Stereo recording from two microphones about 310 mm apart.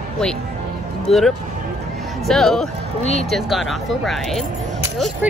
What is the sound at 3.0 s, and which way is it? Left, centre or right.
Speech, left.